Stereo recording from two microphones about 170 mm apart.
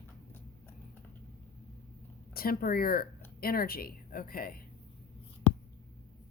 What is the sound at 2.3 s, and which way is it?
Speech, 60° left (ahead or behind).